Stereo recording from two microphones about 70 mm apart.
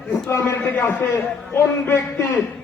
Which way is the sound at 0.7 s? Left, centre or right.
Left.